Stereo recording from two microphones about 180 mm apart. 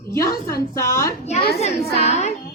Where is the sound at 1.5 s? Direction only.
35° left (ahead or behind).